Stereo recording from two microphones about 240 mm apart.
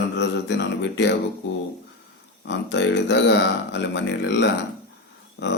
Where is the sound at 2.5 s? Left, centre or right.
Left.